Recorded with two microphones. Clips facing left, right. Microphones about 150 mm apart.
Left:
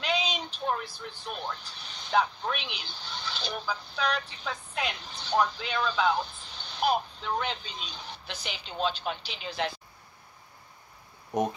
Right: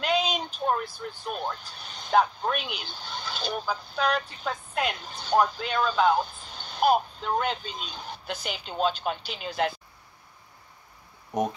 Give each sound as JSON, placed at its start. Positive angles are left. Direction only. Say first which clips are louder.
{"t": 0.0, "sound": "speech", "louder": "right 4 dB", "side_deg": -45}